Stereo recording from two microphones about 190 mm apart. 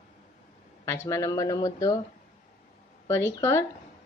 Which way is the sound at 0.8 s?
15° left (ahead or behind).